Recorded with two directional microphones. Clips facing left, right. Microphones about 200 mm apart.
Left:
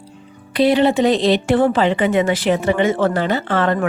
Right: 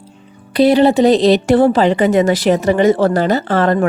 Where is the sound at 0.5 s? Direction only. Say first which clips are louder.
Right 4 dB; 40° right (ahead or behind).